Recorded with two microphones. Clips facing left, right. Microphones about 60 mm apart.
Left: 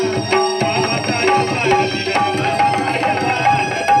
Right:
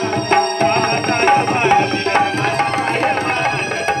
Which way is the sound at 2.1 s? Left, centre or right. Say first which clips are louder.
Left 1 dB; centre.